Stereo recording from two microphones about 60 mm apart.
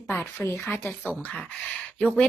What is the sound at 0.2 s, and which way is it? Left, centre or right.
Speech, left.